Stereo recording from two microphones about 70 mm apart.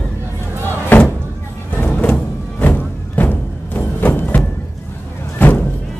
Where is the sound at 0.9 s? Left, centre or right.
Left.